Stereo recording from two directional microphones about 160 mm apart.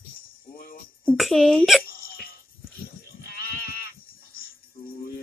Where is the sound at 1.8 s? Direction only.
65° left (ahead or behind).